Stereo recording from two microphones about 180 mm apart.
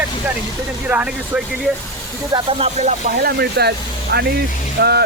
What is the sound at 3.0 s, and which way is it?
Speech, 60° right (ahead or behind).